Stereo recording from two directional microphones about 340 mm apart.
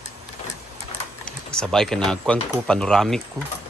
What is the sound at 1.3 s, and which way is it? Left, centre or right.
Speech, centre.